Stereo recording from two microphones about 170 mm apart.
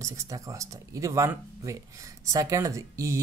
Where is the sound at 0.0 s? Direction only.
20° right (ahead or behind).